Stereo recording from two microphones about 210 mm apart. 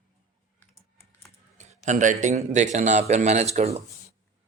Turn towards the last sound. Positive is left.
turn(degrees=-30)  # may be behind; listen again after turning